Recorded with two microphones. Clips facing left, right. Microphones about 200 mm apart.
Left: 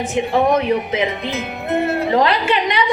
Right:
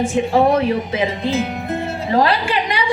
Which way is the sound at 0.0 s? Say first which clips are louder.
Right 2 dB; 20° left (ahead or behind).